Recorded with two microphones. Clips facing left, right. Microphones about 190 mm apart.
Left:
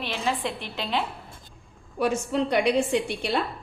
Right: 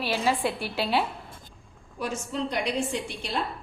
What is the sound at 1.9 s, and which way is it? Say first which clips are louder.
A woman's voice: left 7 dB; 65° left (ahead or behind).